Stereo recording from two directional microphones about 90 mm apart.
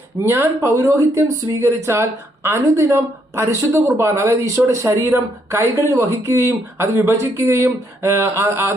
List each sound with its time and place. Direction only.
0.2 s speech: 25° right (ahead or behind)